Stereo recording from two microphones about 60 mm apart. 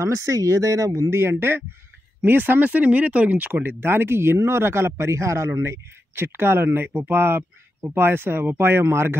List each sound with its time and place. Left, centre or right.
0.0 s speech: right
1.1 s speech: right